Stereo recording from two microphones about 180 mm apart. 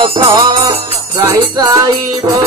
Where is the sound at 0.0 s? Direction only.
25° right (ahead or behind).